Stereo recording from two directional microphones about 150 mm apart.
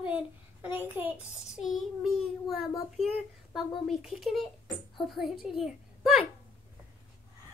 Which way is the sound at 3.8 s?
Centre (ahead or behind).